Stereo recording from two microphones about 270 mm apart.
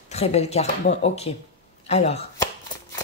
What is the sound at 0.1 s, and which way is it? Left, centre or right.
Speech, left.